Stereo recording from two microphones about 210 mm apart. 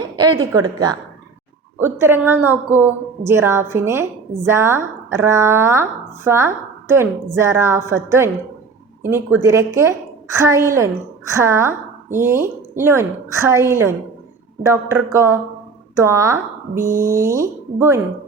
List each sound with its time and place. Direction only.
0.2 s a woman's voice: 15° right (ahead or behind)